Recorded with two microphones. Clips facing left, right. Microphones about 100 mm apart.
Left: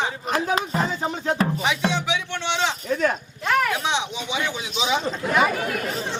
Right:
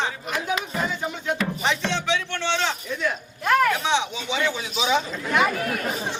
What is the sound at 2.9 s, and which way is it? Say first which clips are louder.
Speech: left 5 dB; 45° left (ahead or behind).